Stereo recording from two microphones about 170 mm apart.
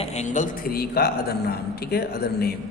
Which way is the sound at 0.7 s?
65° left (ahead or behind).